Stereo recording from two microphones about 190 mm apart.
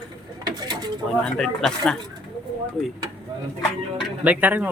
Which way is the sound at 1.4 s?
5° left (ahead or behind).